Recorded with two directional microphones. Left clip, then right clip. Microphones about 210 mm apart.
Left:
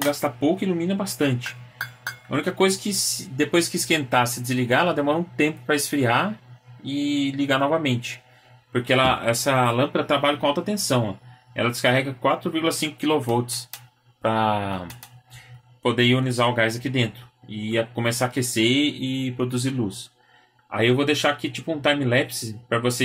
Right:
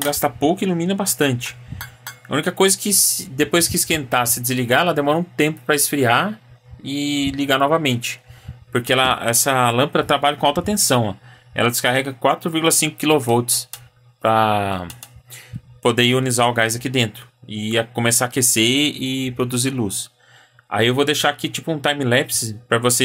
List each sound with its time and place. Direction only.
0.0 s speech: 55° right (ahead or behind)
20.7 s speech: 55° right (ahead or behind)